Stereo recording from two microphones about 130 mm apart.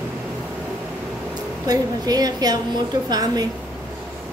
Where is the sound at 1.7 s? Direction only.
30° right (ahead or behind).